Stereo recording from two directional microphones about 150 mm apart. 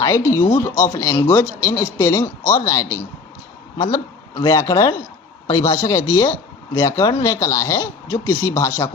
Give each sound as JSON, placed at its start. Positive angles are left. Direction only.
{"t": 0.0, "sound": "a man's voice", "side_deg": 20}